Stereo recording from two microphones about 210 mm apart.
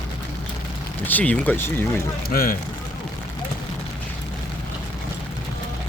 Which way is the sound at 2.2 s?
45° left (ahead or behind).